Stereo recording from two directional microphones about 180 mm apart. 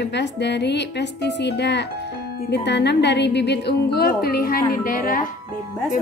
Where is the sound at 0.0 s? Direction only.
70° left (ahead or behind); by 5.2 s 50° left (ahead or behind).